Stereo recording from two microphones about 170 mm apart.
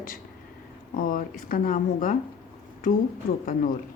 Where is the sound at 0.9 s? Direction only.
55° left (ahead or behind).